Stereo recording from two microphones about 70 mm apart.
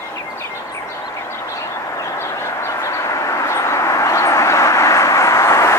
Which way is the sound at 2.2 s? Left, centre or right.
Left.